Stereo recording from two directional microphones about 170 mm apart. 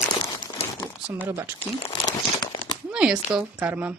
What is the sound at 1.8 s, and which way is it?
Crumpling, 30° left (ahead or behind).